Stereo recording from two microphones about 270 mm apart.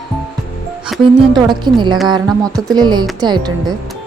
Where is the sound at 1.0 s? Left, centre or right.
Centre.